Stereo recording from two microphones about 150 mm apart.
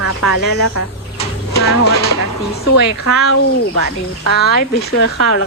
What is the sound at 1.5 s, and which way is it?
Speech, 90° left.